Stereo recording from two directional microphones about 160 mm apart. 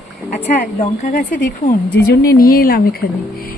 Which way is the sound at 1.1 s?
55° left (ahead or behind).